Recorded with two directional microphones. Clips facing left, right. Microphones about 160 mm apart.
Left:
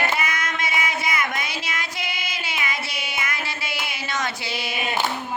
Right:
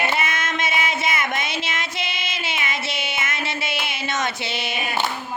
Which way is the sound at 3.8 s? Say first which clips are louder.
Right 1 dB; 20° right (ahead or behind).